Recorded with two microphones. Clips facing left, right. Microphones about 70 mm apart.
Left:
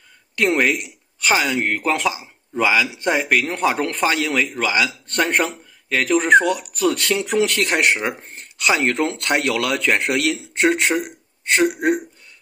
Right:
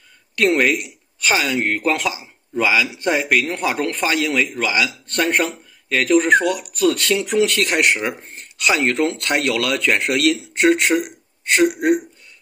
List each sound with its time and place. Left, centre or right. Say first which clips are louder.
0.4 s speech: right 2 dB; centre
0.7 s a man's voice: right 1 dB; left